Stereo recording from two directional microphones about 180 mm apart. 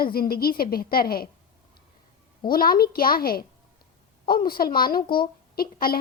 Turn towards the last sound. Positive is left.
turn(degrees=55)  # may be behind; listen again after turning